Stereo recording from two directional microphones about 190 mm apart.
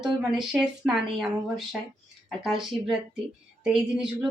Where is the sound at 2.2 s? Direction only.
Centre (ahead or behind).